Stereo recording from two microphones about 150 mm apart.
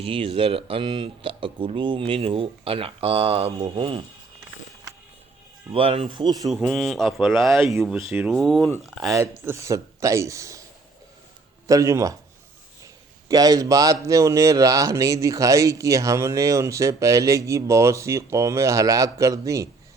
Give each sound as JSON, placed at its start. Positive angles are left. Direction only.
{"t": 0.0, "sound": "speech", "side_deg": -35}
{"t": 5.7, "sound": "speech", "side_deg": -40}
{"t": 6.5, "sound": "speech", "side_deg": 0}
{"t": 9.4, "sound": "speech", "side_deg": -20}
{"t": 11.7, "sound": "speech", "side_deg": -20}
{"t": 13.2, "sound": "speech", "side_deg": -25}